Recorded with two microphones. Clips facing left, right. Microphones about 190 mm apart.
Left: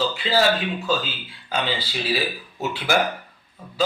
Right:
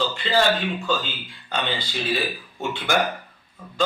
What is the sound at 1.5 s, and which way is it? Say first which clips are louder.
Speech: left 2 dB; 5° left (ahead or behind).